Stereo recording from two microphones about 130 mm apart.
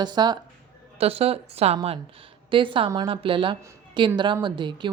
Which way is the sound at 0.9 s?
50° right (ahead or behind).